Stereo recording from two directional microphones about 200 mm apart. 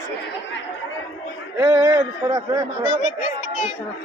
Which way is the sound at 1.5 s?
15° right (ahead or behind).